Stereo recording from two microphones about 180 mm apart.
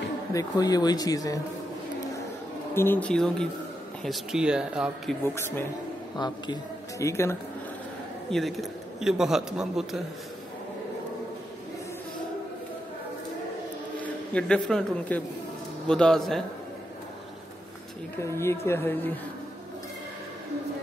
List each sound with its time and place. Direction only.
0.3 s speech: 20° left (ahead or behind)
2.7 s a man's voice: 10° left (ahead or behind); by 5.1 s 5° right (ahead or behind)
5.2 s speech: 15° left (ahead or behind)
6.1 s speech: 25° left (ahead or behind)
8.3 s a man's voice: centre (ahead or behind)
14.0 s a man's voice: 5° left (ahead or behind)
18.1 s speech: 15° left (ahead or behind)